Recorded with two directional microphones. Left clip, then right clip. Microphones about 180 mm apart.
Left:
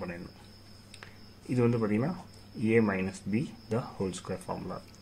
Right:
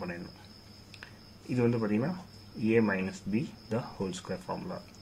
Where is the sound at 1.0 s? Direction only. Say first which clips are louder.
Even; 15° left (ahead or behind).